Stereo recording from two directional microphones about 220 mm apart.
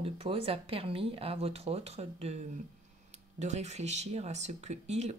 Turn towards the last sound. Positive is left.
turn(degrees=-30)  # may be behind; listen again after turning